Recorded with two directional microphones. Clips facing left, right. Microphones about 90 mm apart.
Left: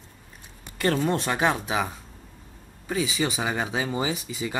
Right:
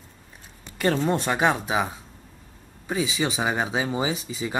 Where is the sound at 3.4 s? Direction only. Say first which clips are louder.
Right 2 dB; 20° right (ahead or behind).